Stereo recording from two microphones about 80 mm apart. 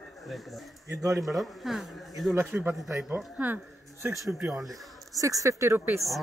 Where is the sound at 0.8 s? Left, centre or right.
Right.